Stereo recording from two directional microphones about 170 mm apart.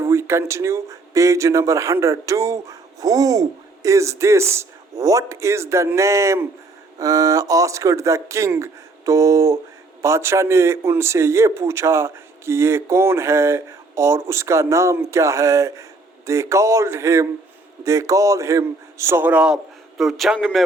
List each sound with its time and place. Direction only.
0.0 s a man's voice: 15° right (ahead or behind); by 20.7 s centre (ahead or behind)